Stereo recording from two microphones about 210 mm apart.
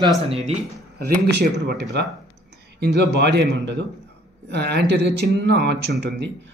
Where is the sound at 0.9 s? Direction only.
45° right (ahead or behind).